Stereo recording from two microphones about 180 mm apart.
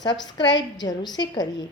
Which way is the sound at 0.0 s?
25° left (ahead or behind).